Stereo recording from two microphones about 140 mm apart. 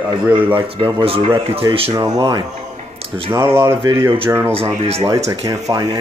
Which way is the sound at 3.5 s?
15° right (ahead or behind).